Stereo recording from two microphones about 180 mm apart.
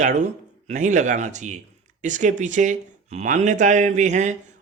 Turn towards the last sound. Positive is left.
turn(degrees=-40)  # may be behind; listen again after turning